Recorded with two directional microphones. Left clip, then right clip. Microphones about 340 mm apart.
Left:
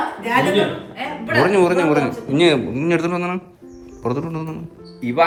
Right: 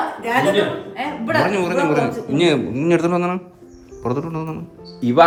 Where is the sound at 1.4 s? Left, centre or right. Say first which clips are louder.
Left 6 dB; centre.